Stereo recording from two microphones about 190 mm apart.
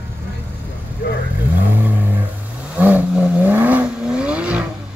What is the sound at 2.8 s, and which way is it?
Vehicle, 10° right (ahead or behind).